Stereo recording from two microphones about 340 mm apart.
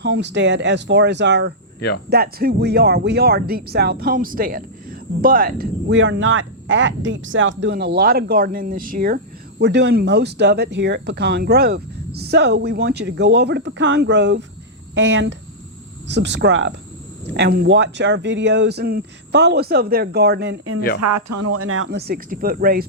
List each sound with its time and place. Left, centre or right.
0.0 s speech: right
21.0 s speech: right